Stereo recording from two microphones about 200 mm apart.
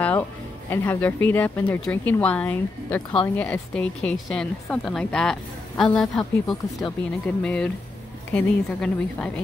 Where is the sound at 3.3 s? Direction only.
10° left (ahead or behind).